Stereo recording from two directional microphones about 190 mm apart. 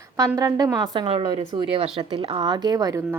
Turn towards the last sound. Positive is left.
turn(degrees=-20)  # may be behind; listen again after turning